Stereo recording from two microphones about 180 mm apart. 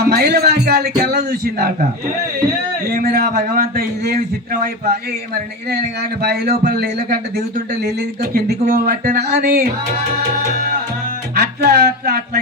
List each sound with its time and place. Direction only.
0.0 s speech: 60° right (ahead or behind)
2.9 s speech: 55° right (ahead or behind)
11.3 s speech: 60° right (ahead or behind)